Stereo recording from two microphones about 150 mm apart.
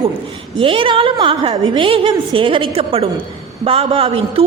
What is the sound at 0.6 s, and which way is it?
A woman's voice, 35° right (ahead or behind).